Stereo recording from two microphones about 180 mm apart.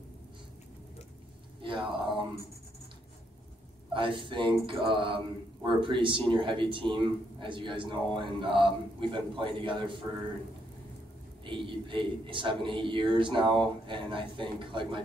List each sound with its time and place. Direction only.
1.6 s a sound: 30° right (ahead or behind)
3.9 s speech: 30° right (ahead or behind)
11.4 s speech: 25° right (ahead or behind)